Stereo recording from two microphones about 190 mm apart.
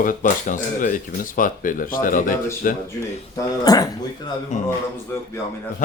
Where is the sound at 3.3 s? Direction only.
20° left (ahead or behind).